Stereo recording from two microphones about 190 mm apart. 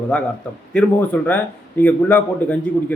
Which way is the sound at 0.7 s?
5° left (ahead or behind).